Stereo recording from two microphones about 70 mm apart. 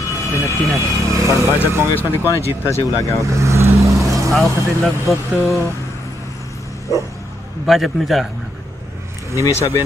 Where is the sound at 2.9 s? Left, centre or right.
Left.